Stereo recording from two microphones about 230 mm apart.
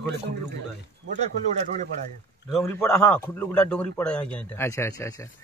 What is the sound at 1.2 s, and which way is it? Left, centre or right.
Speech, right.